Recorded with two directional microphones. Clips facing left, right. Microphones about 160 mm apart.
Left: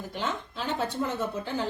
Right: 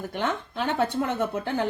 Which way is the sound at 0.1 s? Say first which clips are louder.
Right 3 dB; 60° right (ahead or behind).